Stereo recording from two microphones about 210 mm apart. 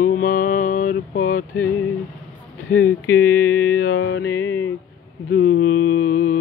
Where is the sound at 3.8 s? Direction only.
50° left (ahead or behind).